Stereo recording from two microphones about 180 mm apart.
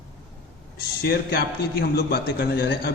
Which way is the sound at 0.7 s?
60° left (ahead or behind).